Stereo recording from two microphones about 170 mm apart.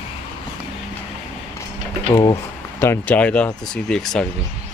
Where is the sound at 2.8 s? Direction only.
10° left (ahead or behind).